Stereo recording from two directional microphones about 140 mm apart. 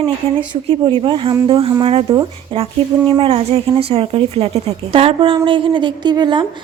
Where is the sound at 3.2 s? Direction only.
40° right (ahead or behind).